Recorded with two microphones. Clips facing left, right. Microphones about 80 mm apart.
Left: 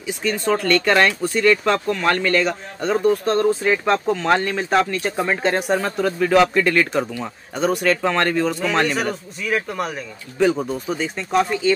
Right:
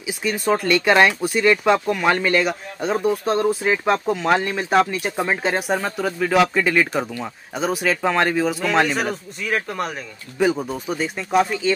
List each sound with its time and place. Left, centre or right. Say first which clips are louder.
0.0 s speech: left 1 dB; centre